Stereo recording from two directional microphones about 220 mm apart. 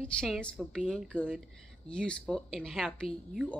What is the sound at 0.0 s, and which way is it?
Speech, 5° left (ahead or behind).